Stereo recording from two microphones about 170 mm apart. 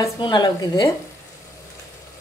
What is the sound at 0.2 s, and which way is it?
Speech, 25° left (ahead or behind).